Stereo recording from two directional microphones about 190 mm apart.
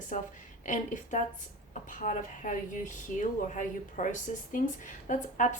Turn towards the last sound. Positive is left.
turn(degrees=40)  # may be behind; listen again after turning